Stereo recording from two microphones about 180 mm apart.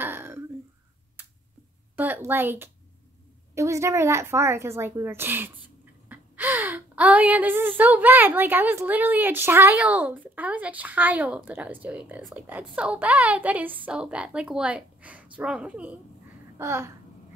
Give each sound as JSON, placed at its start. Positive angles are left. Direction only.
{"t": 0.0, "sound": "throat clearing", "side_deg": -10}
{"t": 2.0, "sound": "speech", "side_deg": -10}
{"t": 16.5, "sound": "babbling", "side_deg": -15}